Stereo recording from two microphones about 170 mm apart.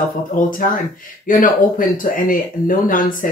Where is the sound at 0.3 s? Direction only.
50° left (ahead or behind).